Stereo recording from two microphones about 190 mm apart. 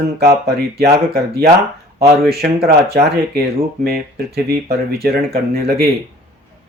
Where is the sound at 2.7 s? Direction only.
55° right (ahead or behind).